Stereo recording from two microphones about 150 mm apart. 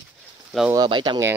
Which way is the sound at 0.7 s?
30° right (ahead or behind).